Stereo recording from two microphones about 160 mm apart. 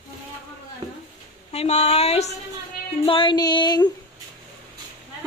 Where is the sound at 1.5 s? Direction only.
40° left (ahead or behind).